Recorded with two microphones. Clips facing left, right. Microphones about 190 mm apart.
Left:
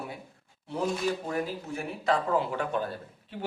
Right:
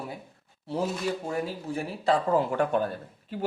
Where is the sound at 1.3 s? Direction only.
30° right (ahead or behind).